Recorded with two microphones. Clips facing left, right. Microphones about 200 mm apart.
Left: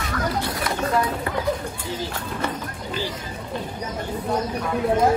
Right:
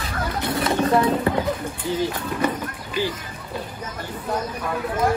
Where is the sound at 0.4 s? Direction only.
25° right (ahead or behind).